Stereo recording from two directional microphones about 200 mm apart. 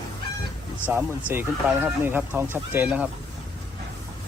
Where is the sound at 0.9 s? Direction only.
10° right (ahead or behind).